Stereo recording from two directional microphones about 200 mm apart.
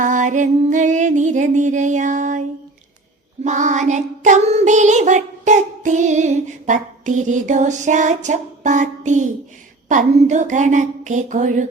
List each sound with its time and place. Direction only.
0.0 s child singing: 40° right (ahead or behind)
3.4 s child singing: 35° right (ahead or behind)